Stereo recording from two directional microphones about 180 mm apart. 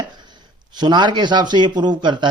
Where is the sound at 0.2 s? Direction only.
25° right (ahead or behind).